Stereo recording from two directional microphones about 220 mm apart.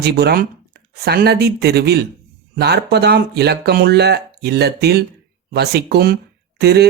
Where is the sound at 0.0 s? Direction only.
45° right (ahead or behind).